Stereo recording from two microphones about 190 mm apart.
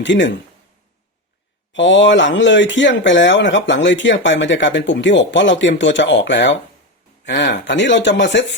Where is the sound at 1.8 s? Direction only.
75° left (ahead or behind).